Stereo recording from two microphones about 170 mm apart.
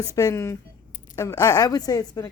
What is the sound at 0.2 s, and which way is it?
A woman's voice, 15° left (ahead or behind).